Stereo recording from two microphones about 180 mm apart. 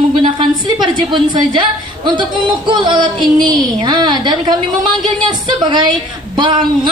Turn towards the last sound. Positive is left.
turn(degrees=-25)  # may be behind; listen again after turning